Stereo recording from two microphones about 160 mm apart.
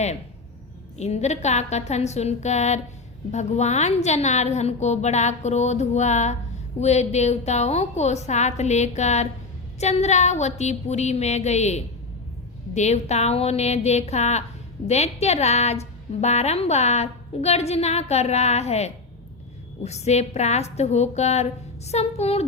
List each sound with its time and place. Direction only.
0.9 s a woman's voice: 45° left (ahead or behind)